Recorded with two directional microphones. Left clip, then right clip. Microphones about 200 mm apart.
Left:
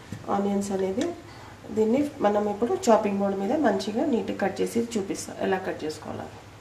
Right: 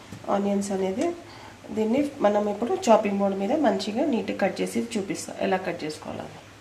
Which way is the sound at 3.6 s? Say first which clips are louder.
Even; 15° right (ahead or behind).